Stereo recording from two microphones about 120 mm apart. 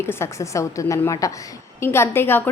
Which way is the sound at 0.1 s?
25° left (ahead or behind).